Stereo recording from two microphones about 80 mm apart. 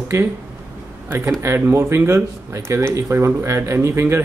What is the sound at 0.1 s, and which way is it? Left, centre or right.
A man's voice, right.